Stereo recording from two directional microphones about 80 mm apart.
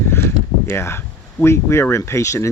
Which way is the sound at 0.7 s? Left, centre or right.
Left.